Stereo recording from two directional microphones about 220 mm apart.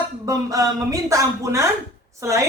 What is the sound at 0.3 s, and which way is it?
Speech, 15° right (ahead or behind).